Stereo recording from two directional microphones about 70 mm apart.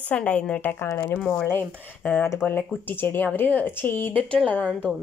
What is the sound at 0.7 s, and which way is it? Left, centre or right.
Speech, left.